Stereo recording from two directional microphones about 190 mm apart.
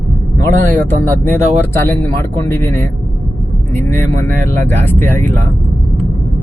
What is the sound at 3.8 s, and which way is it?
Speech, 15° left (ahead or behind).